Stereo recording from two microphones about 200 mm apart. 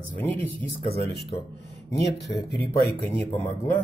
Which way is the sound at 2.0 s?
55° left (ahead or behind).